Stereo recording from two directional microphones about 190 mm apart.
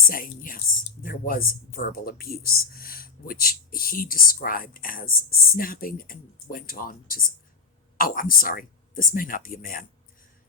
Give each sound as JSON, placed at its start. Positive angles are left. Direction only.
{"t": 0.1, "sound": "speech", "side_deg": 50}